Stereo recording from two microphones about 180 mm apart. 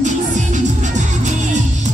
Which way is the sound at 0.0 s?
45° right (ahead or behind).